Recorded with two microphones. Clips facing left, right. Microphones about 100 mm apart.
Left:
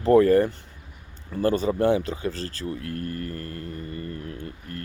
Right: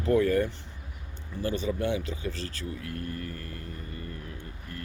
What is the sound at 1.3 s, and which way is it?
Speech, 55° left (ahead or behind).